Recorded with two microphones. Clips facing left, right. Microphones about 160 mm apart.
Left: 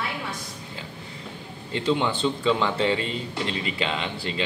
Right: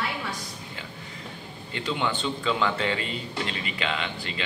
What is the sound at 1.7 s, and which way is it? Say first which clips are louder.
Speech: left 5 dB; 30° left (ahead or behind).